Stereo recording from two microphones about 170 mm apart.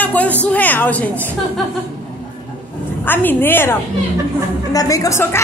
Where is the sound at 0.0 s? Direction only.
10° left (ahead or behind).